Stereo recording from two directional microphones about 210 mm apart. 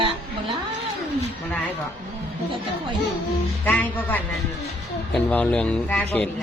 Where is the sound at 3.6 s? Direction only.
10° left (ahead or behind).